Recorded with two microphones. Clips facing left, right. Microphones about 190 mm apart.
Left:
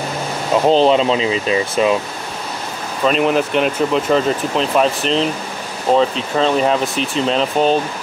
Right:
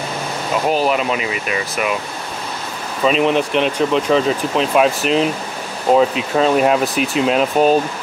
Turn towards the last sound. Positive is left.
turn(degrees=-5)  # may be behind; listen again after turning